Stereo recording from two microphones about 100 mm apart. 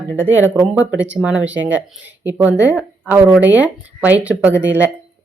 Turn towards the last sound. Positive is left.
turn(degrees=-15)  # may be behind; listen again after turning